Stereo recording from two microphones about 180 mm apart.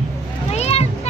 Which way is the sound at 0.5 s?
35° left (ahead or behind).